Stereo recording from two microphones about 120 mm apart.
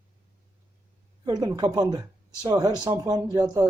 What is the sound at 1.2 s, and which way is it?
A woman's voice, 35° right (ahead or behind).